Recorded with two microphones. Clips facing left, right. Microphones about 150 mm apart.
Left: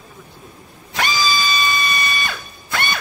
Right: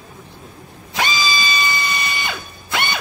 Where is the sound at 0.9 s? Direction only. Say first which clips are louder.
Left 1 dB; 20° right (ahead or behind).